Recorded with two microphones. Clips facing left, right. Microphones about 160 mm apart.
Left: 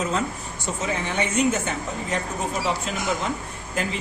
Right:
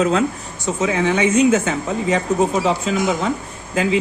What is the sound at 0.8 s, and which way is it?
Speech, 90° right.